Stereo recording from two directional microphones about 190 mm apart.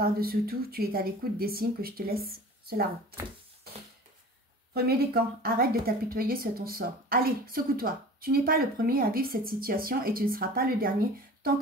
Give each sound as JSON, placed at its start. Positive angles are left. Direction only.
{"t": 0.0, "sound": "a woman's voice", "side_deg": -50}
{"t": 4.7, "sound": "a woman's voice", "side_deg": -55}